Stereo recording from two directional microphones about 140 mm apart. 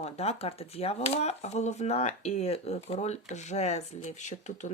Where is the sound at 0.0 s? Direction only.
50° left (ahead or behind).